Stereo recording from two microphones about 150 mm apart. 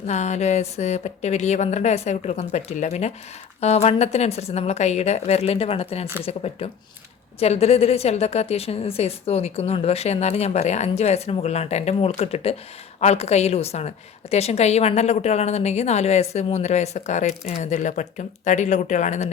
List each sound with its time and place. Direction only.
0.1 s a woman's voice: 50° left (ahead or behind)